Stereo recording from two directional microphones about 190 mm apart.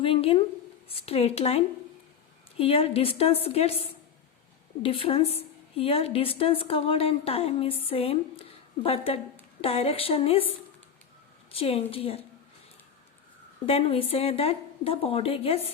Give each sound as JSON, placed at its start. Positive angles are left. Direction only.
{"t": 0.0, "sound": "a woman's voice", "side_deg": 30}
{"t": 11.5, "sound": "a woman's voice", "side_deg": 30}
{"t": 13.7, "sound": "a woman's voice", "side_deg": 30}